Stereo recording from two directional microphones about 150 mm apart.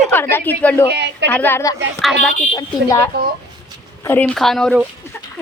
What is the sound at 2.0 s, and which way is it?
Speech, 5° left (ahead or behind).